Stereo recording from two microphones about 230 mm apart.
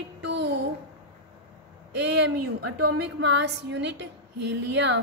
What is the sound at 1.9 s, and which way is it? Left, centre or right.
A woman's voice, right.